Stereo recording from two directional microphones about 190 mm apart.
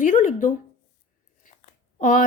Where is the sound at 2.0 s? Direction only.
45° left (ahead or behind).